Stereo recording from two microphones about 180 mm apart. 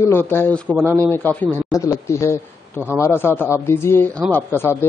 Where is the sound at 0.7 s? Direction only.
10° right (ahead or behind).